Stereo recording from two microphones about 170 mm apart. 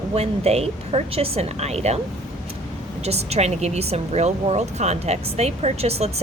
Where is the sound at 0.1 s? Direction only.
40° right (ahead or behind).